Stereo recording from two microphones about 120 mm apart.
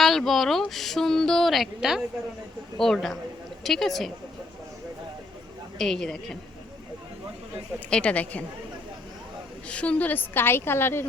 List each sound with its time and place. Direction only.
0.0 s speech: centre (ahead or behind)
5.8 s speech: 5° left (ahead or behind)
7.9 s a woman's voice: 10° left (ahead or behind)
9.6 s a woman's voice: 10° left (ahead or behind)